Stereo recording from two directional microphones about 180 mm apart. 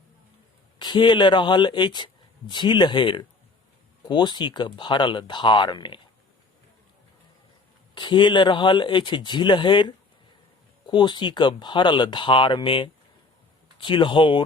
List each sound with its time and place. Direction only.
0.8 s speech: 25° left (ahead or behind)
7.9 s speech: 25° left (ahead or behind)